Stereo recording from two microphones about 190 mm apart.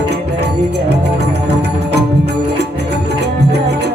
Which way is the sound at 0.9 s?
60° right (ahead or behind).